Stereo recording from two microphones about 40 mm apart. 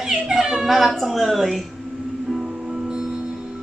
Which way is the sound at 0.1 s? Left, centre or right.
Centre.